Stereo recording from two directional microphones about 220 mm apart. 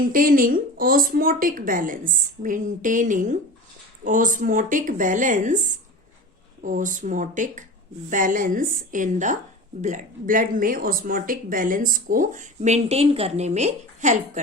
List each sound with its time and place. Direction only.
0.0 s speech: 40° right (ahead or behind)
6.6 s speech: 35° right (ahead or behind)